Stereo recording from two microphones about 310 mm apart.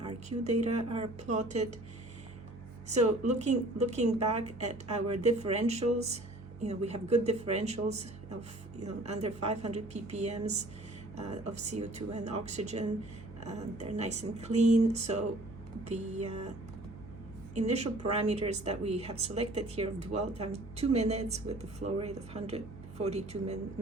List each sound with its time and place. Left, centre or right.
0.0 s speech: right
2.9 s speech: right
17.5 s speech: right